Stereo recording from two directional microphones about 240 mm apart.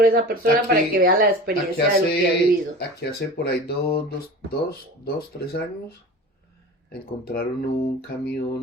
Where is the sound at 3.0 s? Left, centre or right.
Left.